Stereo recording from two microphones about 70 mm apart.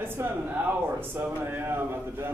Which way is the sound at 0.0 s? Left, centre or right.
Right.